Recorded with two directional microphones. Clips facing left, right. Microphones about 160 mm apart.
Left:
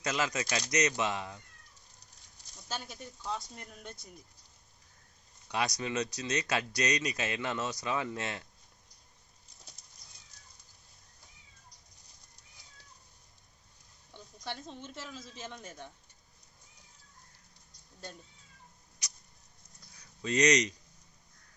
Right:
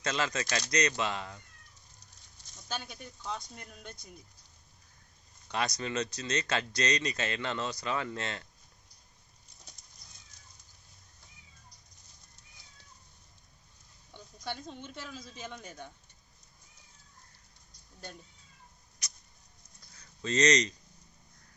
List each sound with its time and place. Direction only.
0.0 s speech: 15° left (ahead or behind)
2.6 s speech: 5° left (ahead or behind)
5.5 s speech: 15° left (ahead or behind)
14.1 s speech: centre (ahead or behind)
20.0 s speech: 15° left (ahead or behind)